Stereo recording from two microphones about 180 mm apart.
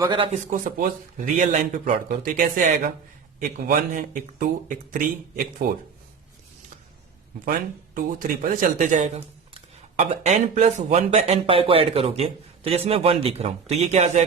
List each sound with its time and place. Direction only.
0.3 s speech: 45° right (ahead or behind)
7.9 s speech: 50° right (ahead or behind)